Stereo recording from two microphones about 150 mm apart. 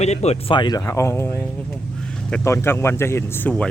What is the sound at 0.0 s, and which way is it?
Speech, 45° left (ahead or behind).